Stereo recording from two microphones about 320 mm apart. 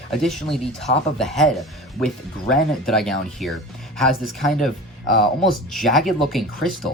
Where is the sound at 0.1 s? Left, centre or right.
Centre.